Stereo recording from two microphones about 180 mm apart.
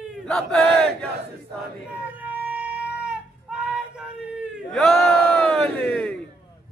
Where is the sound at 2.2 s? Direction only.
10° right (ahead or behind).